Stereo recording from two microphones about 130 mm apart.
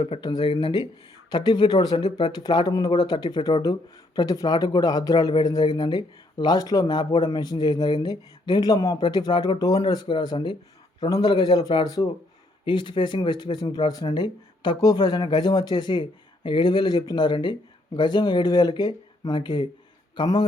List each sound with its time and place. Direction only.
0.0 s speech: 40° left (ahead or behind)